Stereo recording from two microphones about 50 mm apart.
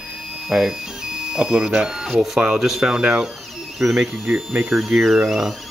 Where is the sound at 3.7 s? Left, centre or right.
Centre.